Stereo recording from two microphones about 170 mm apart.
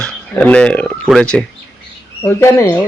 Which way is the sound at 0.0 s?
10° left (ahead or behind).